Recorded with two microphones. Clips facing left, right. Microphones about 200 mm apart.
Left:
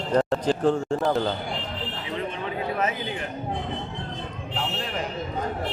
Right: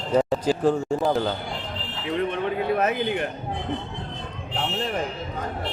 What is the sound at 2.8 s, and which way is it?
Speech, 65° right (ahead or behind).